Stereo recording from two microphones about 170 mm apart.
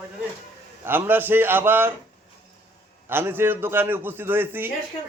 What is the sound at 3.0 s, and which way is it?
A man's voice, 15° right (ahead or behind).